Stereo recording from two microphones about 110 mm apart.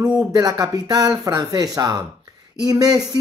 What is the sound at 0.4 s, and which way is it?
Speech, 35° right (ahead or behind).